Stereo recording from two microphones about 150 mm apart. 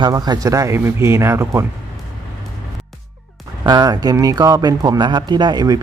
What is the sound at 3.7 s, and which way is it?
Speech, 25° right (ahead or behind).